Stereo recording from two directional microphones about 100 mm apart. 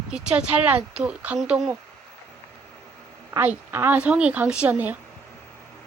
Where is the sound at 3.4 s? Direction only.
20° right (ahead or behind).